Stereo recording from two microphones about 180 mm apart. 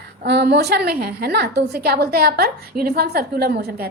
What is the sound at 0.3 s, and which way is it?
A woman's voice, 65° right (ahead or behind).